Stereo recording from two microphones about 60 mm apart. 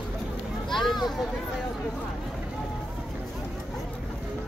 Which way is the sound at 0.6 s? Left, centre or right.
Centre.